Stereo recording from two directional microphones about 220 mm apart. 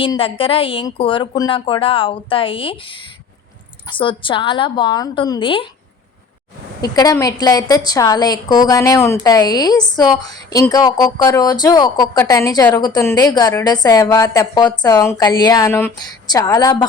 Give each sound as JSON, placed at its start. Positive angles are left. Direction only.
{"t": 0.0, "sound": "a woman's voice", "side_deg": 25}
{"t": 6.8, "sound": "a woman's voice", "side_deg": 15}